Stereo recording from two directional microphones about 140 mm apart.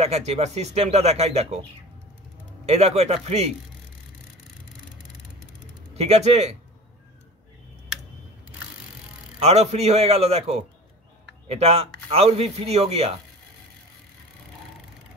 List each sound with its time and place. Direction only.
0.0 s a man's voice: 50° right (ahead or behind)
5.9 s a man's voice: 50° right (ahead or behind)
9.4 s a man's voice: 50° right (ahead or behind)